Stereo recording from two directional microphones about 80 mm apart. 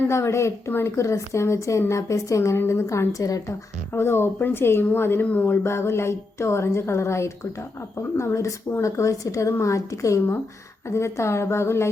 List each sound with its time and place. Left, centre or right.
0.1 s a woman's voice: left
3.9 s speech: left
5.6 s a woman's voice: left